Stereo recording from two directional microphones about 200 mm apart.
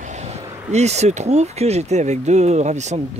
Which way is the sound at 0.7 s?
35° right (ahead or behind).